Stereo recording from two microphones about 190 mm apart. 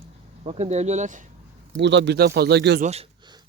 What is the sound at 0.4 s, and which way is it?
Speech, 35° right (ahead or behind).